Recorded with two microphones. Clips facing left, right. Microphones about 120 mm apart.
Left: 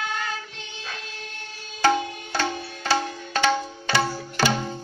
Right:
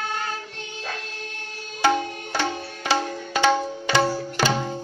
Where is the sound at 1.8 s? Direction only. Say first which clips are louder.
Even; 10° right (ahead or behind).